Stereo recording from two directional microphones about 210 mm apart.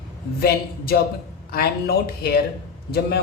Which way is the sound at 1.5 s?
45° left (ahead or behind).